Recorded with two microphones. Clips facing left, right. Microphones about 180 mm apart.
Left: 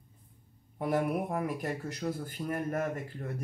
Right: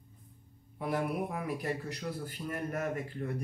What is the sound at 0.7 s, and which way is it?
Speech, 45° left (ahead or behind).